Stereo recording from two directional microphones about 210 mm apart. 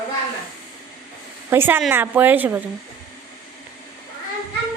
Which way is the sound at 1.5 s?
10° right (ahead or behind).